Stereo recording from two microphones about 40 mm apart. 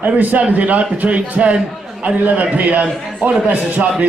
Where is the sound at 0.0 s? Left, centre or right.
Right.